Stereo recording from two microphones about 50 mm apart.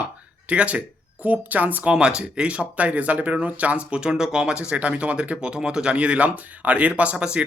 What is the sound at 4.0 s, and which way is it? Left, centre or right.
Speech, centre.